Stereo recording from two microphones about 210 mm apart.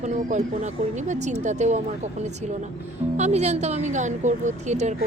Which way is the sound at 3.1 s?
30° right (ahead or behind).